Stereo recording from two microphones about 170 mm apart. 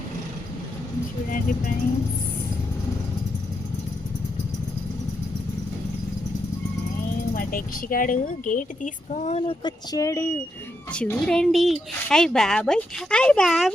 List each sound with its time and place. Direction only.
7.3 s speech: 55° left (ahead or behind); by 9.6 s 40° left (ahead or behind)
9.6 s speech: 20° left (ahead or behind); by 13.7 s 5° left (ahead or behind)